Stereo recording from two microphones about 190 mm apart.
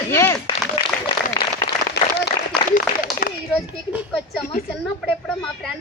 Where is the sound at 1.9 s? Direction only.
60° left (ahead or behind).